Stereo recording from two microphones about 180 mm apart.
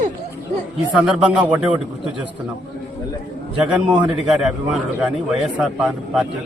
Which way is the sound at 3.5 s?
5° right (ahead or behind).